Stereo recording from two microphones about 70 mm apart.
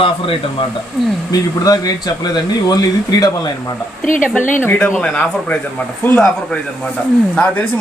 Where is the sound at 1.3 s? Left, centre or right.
Left.